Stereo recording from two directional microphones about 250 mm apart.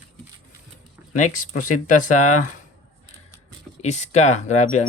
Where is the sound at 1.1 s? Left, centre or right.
Left.